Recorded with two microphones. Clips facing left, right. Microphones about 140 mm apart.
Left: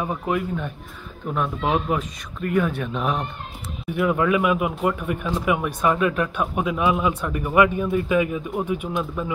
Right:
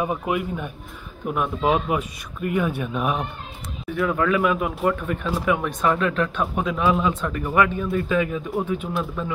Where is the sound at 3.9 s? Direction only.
15° left (ahead or behind).